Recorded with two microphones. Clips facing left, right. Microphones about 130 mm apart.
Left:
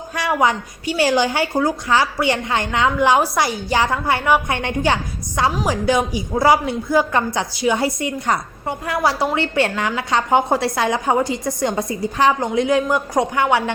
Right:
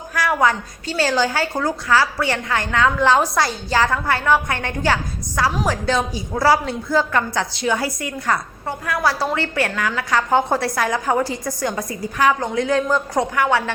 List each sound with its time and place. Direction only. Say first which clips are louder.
0.1 s a woman's voice: even; 25° left (ahead or behind)